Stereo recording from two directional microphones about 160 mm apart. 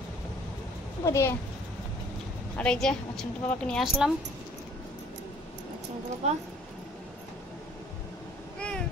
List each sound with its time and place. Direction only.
1.0 s a child's voice: 20° left (ahead or behind)
2.5 s speech: 5° left (ahead or behind)
6.2 s speech: 40° right (ahead or behind)
8.5 s cat: 5° left (ahead or behind)